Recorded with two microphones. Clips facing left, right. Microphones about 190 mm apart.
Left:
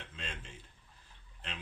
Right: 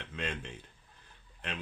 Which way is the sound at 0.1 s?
65° right (ahead or behind).